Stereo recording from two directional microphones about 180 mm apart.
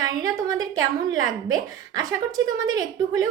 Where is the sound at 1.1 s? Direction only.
90° right.